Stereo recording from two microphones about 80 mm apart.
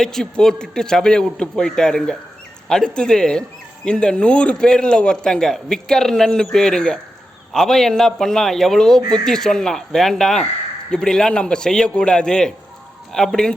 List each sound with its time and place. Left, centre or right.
0.0 s a man's voice: centre
9.0 s speech: right
9.2 s a man's voice: centre